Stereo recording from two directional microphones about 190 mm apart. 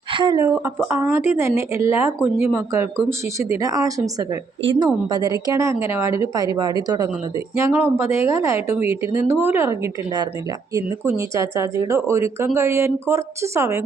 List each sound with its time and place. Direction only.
0.1 s speech: 25° right (ahead or behind)